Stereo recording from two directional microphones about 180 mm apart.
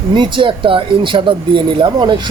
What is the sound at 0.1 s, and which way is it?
Speech, 25° right (ahead or behind).